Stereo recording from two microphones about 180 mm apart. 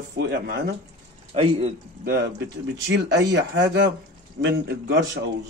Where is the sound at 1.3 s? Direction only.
35° right (ahead or behind).